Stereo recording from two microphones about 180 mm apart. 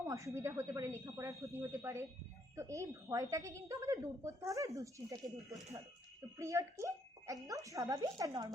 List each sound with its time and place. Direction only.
0.0 s a woman's voice: 15° right (ahead or behind)